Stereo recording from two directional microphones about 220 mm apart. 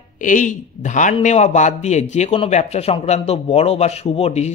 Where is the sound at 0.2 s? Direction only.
35° left (ahead or behind).